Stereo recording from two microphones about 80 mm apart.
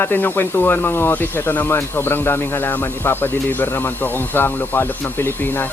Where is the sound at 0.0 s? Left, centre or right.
Left.